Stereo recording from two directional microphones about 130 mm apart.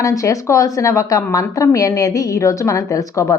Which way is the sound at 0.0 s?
25° left (ahead or behind).